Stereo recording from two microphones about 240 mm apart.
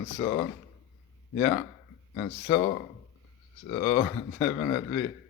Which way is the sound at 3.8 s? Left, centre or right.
Centre.